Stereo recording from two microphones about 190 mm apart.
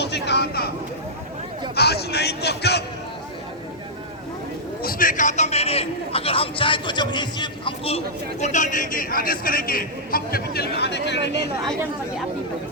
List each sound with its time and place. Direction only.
0.0 s a sound: 60° left (ahead or behind)
1.7 s speech: 60° left (ahead or behind)
4.8 s a man's voice: 50° left (ahead or behind); by 11.4 s 65° left (ahead or behind)